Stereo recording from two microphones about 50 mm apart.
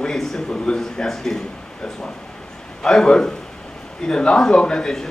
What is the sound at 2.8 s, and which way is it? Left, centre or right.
Speech, centre.